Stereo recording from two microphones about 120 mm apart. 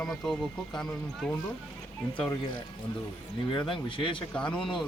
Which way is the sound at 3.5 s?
45° left (ahead or behind).